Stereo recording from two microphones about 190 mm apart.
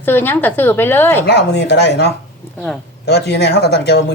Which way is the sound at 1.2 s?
60° left (ahead or behind).